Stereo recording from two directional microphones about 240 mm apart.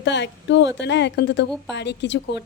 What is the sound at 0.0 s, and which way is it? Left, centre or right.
A woman's voice, left.